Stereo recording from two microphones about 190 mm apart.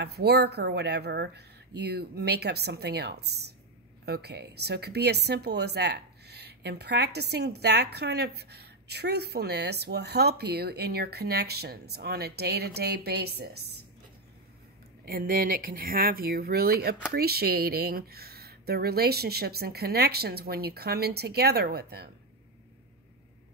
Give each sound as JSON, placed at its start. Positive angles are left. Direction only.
{"t": 0.0, "sound": "speech", "side_deg": -60}
{"t": 15.0, "sound": "speech", "side_deg": -50}